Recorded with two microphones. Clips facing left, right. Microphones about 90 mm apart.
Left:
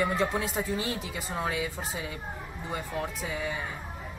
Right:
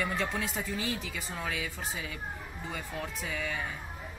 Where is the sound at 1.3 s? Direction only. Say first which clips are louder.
Left 6 dB; 25° left (ahead or behind).